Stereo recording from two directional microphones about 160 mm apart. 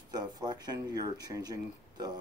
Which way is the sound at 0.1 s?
25° right (ahead or behind).